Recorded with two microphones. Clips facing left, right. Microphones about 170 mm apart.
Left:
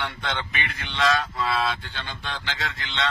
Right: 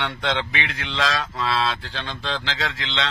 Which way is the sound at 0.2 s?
90° right.